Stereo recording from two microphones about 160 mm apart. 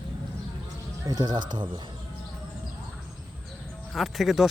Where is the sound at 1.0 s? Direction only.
25° right (ahead or behind).